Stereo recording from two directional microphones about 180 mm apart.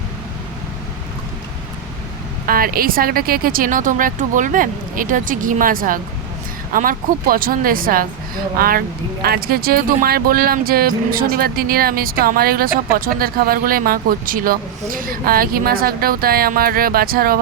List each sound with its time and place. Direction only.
2.5 s speech: 55° right (ahead or behind)